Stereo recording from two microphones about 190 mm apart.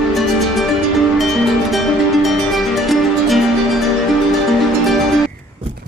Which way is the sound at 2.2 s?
Centre (ahead or behind).